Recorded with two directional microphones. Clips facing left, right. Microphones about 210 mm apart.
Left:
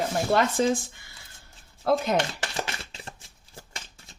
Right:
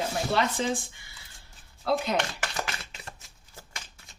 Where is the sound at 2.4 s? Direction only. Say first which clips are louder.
Left 1 dB; 25° left (ahead or behind).